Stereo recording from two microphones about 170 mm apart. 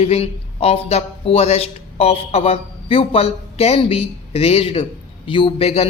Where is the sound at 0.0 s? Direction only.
35° left (ahead or behind).